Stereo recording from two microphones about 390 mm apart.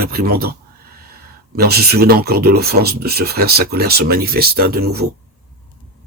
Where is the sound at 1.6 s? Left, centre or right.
Right.